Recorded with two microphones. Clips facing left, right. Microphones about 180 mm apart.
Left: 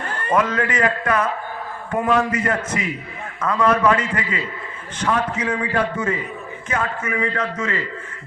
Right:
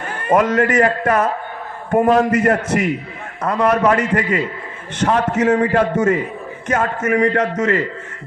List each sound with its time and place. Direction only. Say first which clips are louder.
0.3 s a man's voice: right 6 dB; 45° right (ahead or behind)
2.6 s a man's voice: right 7 dB; 75° right (ahead or behind)
3.4 s a man's voice: right 2 dB; 40° right (ahead or behind)